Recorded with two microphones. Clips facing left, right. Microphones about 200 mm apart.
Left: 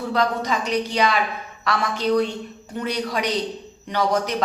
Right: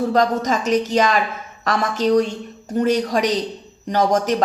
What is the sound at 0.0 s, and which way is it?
A woman's voice, 40° right (ahead or behind).